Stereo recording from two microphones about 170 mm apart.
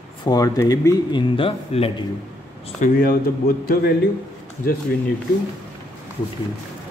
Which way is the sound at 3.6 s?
65° left (ahead or behind).